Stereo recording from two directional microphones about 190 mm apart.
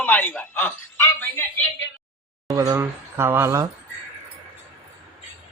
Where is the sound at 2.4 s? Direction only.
20° right (ahead or behind).